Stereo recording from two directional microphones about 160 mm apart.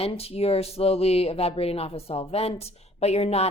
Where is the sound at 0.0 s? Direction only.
40° left (ahead or behind).